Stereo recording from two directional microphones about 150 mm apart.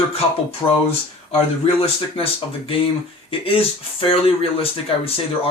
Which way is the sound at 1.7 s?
40° left (ahead or behind).